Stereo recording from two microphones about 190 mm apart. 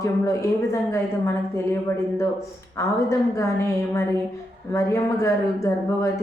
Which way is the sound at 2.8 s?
15° left (ahead or behind).